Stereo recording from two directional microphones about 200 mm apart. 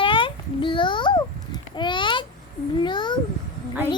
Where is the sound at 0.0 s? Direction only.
25° left (ahead or behind).